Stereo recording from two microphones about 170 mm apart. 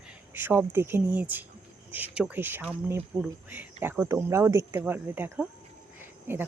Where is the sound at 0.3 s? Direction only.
10° right (ahead or behind).